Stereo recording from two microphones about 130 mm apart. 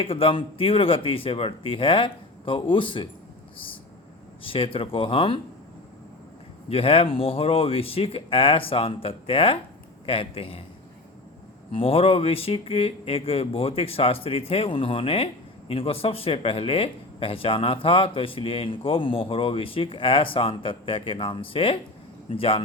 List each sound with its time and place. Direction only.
0.0 s speech: 45° left (ahead or behind)
4.4 s speech: 45° left (ahead or behind)
6.7 s speech: 45° left (ahead or behind)
11.7 s speech: 45° left (ahead or behind)